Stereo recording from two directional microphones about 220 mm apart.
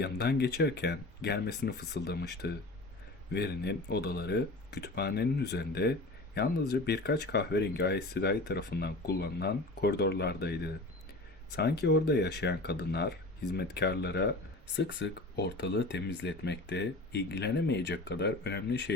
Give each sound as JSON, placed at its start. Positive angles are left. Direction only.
{"t": 0.0, "sound": "speech", "side_deg": 50}